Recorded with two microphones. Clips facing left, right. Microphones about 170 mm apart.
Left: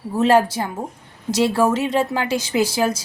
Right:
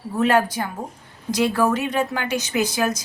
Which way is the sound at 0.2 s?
25° left (ahead or behind).